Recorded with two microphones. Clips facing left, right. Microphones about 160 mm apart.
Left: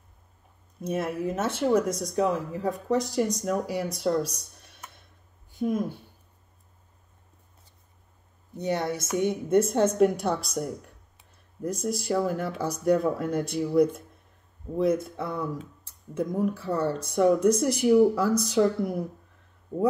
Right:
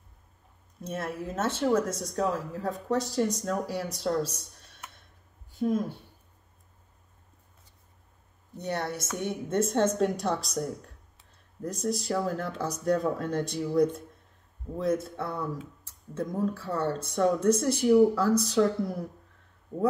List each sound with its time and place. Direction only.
0.8 s a woman's voice: 15° left (ahead or behind)
4.2 s a sound: 15° left (ahead or behind)
5.6 s a woman's voice: 15° left (ahead or behind)
8.5 s a woman's voice: 15° left (ahead or behind)